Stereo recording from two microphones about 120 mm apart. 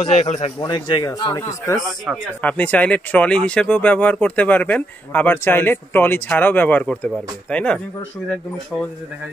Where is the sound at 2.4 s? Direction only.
10° left (ahead or behind).